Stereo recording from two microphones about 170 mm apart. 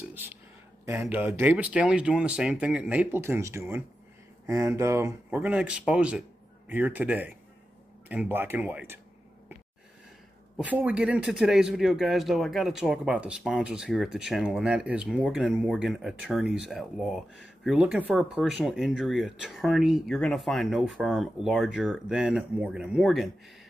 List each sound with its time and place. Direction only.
1.0 s speech: 10° right (ahead or behind)
10.6 s speech: 10° right (ahead or behind)